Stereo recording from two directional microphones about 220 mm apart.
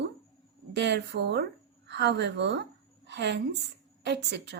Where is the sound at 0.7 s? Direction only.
50° right (ahead or behind).